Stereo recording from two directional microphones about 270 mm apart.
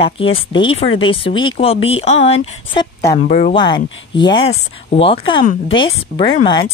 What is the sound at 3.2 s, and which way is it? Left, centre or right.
Speech, left.